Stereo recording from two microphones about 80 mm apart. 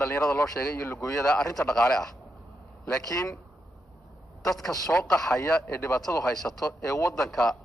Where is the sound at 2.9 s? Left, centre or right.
Left.